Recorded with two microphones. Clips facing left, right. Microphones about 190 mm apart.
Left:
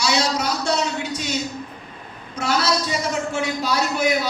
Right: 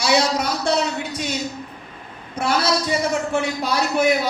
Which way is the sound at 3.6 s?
55° right (ahead or behind).